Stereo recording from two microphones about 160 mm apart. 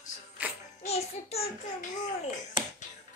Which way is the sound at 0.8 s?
40° left (ahead or behind).